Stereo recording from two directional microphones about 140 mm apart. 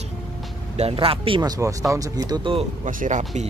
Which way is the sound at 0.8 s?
40° right (ahead or behind).